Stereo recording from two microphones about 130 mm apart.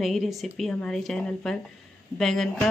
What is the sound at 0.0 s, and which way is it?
Speech, centre (ahead or behind).